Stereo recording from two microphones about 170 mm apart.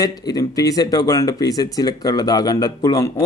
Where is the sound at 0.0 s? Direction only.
20° left (ahead or behind).